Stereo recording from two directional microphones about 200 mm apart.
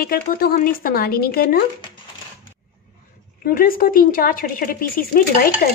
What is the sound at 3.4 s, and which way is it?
A woman's voice, 45° left (ahead or behind).